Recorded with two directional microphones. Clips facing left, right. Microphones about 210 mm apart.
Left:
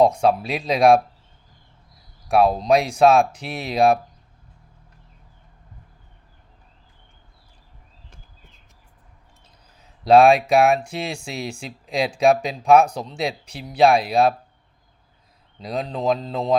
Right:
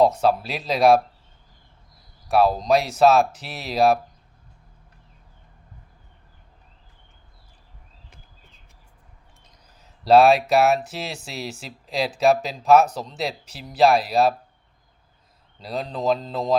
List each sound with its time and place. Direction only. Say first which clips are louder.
0.2 s speech: left 2 dB; 5° right (ahead or behind)
2.3 s speech: left 2 dB; centre (ahead or behind)
10.1 s speech: left 1 dB; 5° right (ahead or behind)
15.7 s speech: left 1 dB; 5° left (ahead or behind)